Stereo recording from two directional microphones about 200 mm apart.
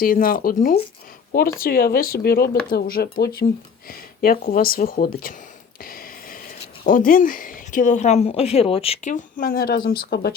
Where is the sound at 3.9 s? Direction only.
45° left (ahead or behind).